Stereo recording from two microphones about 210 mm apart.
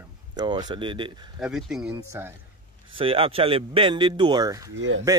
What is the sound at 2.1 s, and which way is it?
Speech, 10° right (ahead or behind).